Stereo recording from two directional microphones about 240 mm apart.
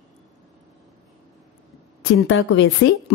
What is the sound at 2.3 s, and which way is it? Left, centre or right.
Speech, left.